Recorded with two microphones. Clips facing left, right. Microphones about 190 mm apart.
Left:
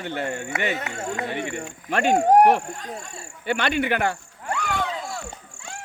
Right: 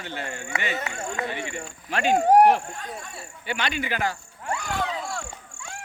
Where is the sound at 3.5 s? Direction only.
55° left (ahead or behind).